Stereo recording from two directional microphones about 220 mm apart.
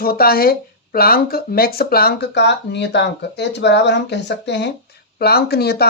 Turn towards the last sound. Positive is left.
turn(degrees=45)  # may be behind; listen again after turning